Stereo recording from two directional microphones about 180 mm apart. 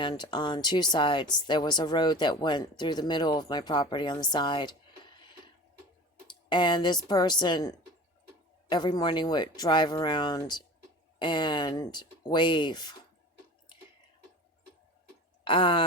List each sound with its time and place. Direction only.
0.0 s speech: 25° left (ahead or behind)
6.2 s speech: 25° left (ahead or behind)
8.7 s speech: 25° left (ahead or behind)
15.4 s speech: 30° left (ahead or behind)